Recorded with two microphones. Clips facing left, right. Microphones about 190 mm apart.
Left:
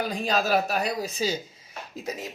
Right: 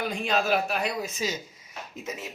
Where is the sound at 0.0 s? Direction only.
35° left (ahead or behind).